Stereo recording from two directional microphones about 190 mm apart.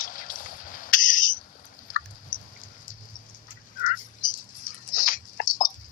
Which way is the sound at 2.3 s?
45° left (ahead or behind).